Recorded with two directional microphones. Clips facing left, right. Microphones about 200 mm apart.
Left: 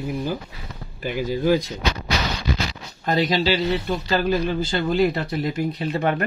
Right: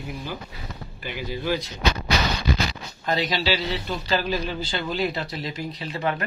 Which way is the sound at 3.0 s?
45° left (ahead or behind).